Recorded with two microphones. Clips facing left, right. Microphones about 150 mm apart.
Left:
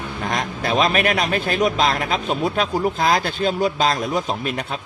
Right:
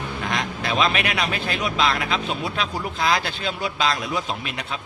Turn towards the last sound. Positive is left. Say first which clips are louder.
# left 5 dB
turn(degrees=45)  # may be behind; listen again after turning